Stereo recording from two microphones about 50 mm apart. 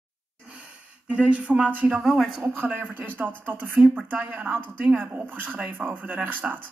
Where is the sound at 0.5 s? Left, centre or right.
Right.